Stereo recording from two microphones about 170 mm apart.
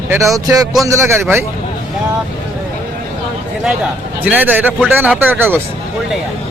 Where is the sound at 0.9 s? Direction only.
15° right (ahead or behind).